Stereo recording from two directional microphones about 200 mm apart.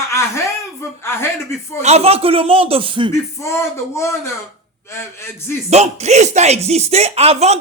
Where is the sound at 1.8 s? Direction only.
30° right (ahead or behind).